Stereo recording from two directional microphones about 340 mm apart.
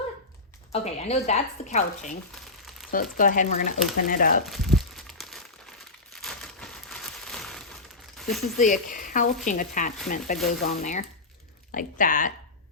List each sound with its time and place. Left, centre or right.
0.7 s speech: centre
4.4 s crumpling: centre
6.1 s a sound: centre
8.2 s speech: centre
8.5 s speech: left